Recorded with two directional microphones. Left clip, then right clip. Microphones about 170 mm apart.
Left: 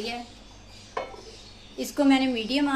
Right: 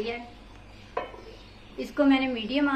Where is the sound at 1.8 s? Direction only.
70° left (ahead or behind).